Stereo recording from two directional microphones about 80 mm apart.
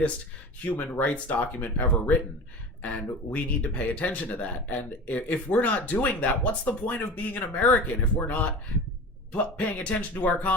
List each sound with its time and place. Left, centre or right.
0.7 s speech: centre